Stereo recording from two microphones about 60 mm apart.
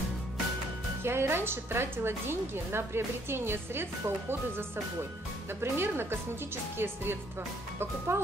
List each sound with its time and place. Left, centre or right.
1.0 s a woman's voice: right